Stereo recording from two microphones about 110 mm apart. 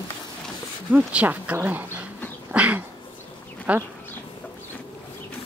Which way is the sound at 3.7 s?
15° right (ahead or behind).